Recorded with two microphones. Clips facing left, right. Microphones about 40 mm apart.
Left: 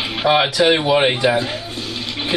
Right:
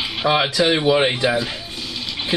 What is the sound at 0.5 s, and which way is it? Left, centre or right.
Speech, left.